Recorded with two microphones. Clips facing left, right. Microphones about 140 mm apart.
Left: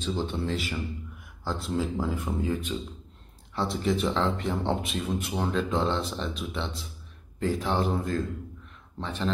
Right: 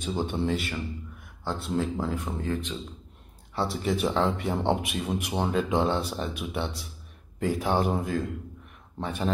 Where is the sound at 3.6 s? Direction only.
5° right (ahead or behind).